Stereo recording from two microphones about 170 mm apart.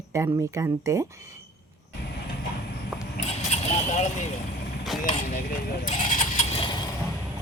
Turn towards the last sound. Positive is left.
turn(degrees=50)  # may be behind; listen again after turning